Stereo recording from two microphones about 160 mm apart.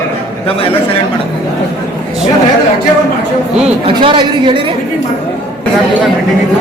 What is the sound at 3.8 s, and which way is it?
Speech, 30° right (ahead or behind).